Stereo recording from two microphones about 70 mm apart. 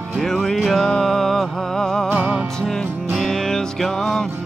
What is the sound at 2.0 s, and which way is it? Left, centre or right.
Music, right.